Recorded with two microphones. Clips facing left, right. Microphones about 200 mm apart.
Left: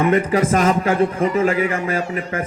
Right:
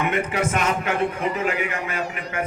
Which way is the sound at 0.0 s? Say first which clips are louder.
Left 7 dB; 35° left (ahead or behind).